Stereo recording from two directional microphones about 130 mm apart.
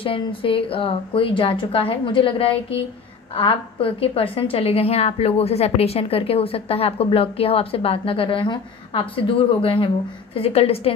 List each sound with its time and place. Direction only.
0.0 s a woman's voice: 45° left (ahead or behind)